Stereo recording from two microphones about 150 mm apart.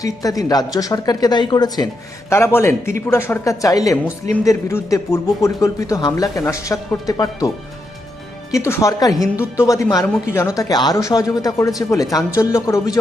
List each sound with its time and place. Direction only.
0.0 s speech: 25° left (ahead or behind)
2.3 s a man's voice: 15° left (ahead or behind)
8.5 s speech: 20° left (ahead or behind)